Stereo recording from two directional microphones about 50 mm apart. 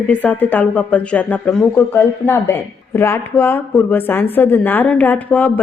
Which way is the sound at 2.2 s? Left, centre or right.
Left.